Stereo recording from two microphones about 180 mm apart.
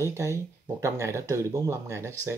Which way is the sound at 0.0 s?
15° right (ahead or behind).